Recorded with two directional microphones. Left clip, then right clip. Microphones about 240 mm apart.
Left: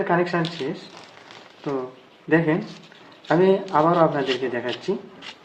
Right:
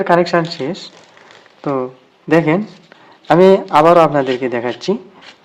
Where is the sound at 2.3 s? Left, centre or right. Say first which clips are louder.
Right 7 dB; right.